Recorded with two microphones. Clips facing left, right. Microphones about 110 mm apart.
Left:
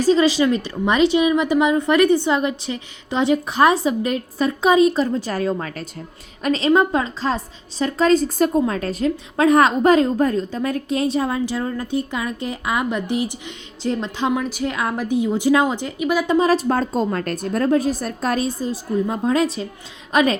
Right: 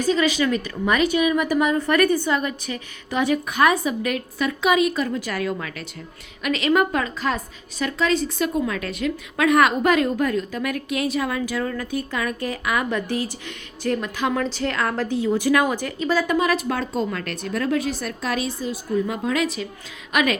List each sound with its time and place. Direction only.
0.0 s a woman's voice: 30° left (ahead or behind); by 16.3 s 15° left (ahead or behind)
16.3 s a woman's voice: 35° left (ahead or behind)